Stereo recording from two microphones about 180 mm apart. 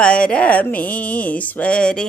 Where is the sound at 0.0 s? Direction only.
5° left (ahead or behind).